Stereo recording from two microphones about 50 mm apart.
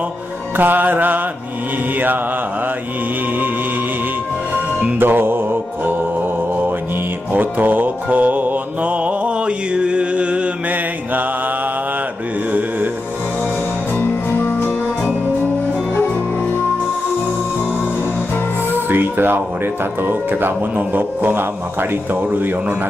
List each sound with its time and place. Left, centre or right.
0.6 s music: right
4.9 s music: right
7.3 s music: right
18.9 s a man's voice: right